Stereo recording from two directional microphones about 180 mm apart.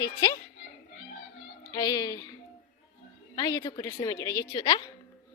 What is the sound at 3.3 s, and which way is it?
A woman's voice, 20° left (ahead or behind).